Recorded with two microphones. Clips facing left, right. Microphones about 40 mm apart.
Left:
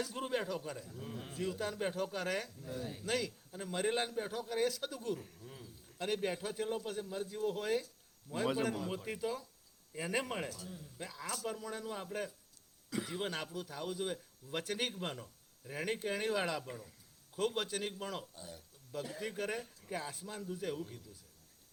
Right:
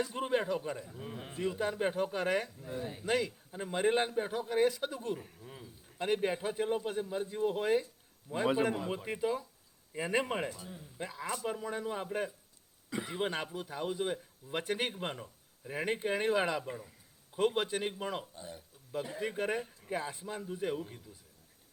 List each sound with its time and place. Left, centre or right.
0.0 s a man's voice: centre